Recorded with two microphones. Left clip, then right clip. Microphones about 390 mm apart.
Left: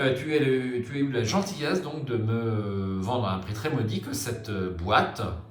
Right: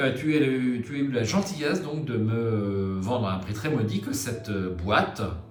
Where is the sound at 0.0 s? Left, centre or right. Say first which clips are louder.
Right 1 dB; centre.